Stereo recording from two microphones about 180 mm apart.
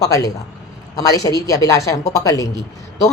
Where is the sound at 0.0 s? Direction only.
20° left (ahead or behind).